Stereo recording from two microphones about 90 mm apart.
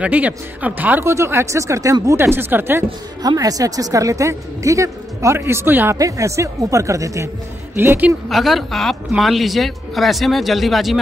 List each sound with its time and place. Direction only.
0.0 s speech: 15° right (ahead or behind)
1.0 s a woman's voice: 30° right (ahead or behind)
3.2 s a woman's voice: 45° right (ahead or behind); by 5.9 s 25° right (ahead or behind)
5.9 s a woman's voice: 40° right (ahead or behind)
7.7 s speech: 25° right (ahead or behind)
8.3 s speech: centre (ahead or behind)